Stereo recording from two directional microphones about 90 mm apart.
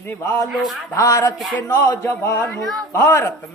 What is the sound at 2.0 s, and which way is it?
A man's voice, 20° left (ahead or behind).